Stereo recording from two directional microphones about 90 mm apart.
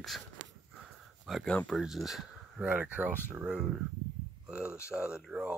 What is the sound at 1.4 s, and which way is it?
Speech, 10° left (ahead or behind).